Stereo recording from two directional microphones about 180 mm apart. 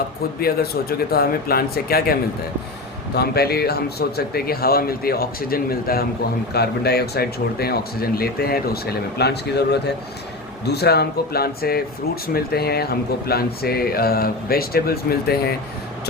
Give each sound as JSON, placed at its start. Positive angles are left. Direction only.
{"t": 0.3, "sound": "speech", "side_deg": 60}
{"t": 3.2, "sound": "speech", "side_deg": 60}
{"t": 10.7, "sound": "speech", "side_deg": 65}